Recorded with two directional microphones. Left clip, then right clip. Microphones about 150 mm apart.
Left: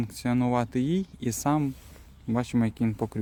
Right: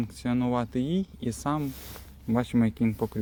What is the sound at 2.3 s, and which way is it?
Speech, 20° left (ahead or behind).